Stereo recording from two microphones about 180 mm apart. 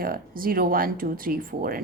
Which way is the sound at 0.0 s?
55° right (ahead or behind).